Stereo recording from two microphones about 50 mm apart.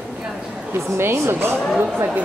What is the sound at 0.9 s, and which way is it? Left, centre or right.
Speech, right.